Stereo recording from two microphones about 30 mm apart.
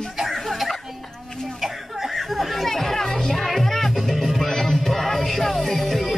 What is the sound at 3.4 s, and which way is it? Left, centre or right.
Music, centre.